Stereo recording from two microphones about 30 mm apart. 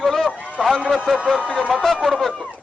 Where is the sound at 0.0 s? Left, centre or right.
Centre.